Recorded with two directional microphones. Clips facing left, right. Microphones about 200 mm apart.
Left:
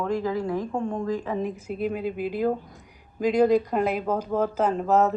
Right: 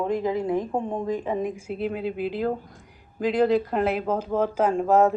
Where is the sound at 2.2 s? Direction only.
45° left (ahead or behind).